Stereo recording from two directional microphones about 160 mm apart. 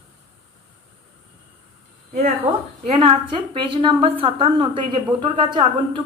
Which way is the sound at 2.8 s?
35° right (ahead or behind).